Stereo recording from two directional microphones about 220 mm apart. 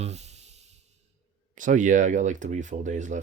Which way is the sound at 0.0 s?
30° right (ahead or behind).